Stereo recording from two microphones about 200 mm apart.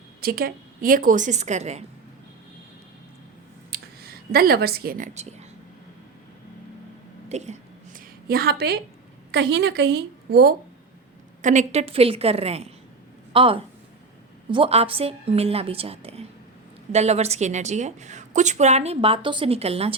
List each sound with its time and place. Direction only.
0.2 s a woman's voice: 50° right (ahead or behind)
3.7 s speech: 50° right (ahead or behind); by 5.5 s 35° right (ahead or behind)
7.3 s a sound: 35° right (ahead or behind)
8.3 s a woman's voice: 50° right (ahead or behind)
11.4 s a woman's voice: 35° right (ahead or behind)